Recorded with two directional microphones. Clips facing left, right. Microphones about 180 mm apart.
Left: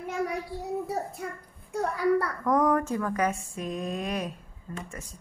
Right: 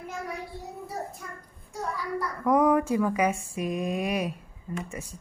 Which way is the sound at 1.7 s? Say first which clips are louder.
Left 8 dB; 60° left (ahead or behind).